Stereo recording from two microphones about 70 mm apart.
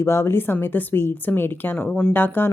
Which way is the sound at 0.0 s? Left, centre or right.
Left.